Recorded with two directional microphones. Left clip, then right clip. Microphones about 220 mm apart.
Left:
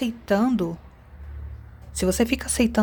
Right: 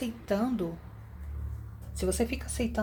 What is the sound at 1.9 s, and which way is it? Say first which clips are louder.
Speech: left 8 dB; 35° left (ahead or behind).